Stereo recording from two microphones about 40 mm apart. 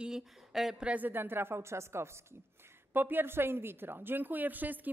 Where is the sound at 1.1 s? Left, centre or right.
Right.